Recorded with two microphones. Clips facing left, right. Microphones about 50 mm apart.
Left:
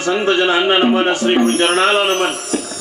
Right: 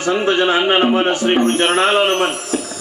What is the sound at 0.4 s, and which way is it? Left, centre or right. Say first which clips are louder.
Speech: even; centre.